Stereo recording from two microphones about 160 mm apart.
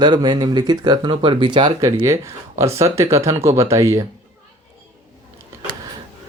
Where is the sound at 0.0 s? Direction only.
25° right (ahead or behind).